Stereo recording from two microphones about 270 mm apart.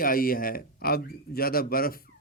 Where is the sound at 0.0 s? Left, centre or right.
Left.